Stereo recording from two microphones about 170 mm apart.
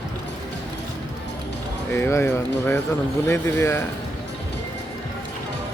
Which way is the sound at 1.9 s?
15° left (ahead or behind).